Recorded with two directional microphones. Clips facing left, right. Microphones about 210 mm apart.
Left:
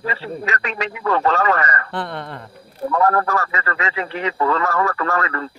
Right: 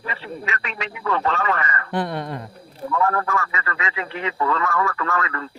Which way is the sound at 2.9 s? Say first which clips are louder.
Left 4 dB; 40° left (ahead or behind).